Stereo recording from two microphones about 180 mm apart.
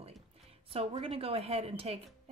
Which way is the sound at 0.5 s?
35° right (ahead or behind).